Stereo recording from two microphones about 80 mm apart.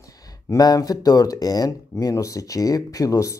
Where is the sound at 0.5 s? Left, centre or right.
Left.